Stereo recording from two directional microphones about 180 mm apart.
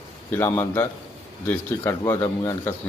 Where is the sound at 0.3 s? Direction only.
15° left (ahead or behind).